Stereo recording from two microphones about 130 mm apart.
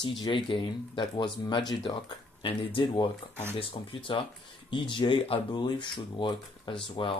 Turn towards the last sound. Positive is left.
turn(degrees=40)  # may be behind; listen again after turning